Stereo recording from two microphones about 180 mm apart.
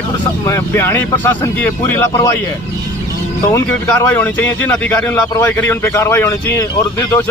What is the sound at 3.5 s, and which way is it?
Speech, 10° left (ahead or behind).